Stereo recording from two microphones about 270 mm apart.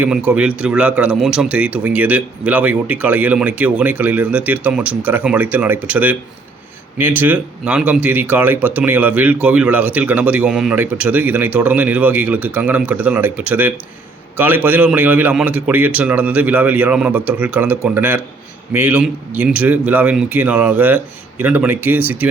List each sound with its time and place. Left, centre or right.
0.0 s a man's voice: centre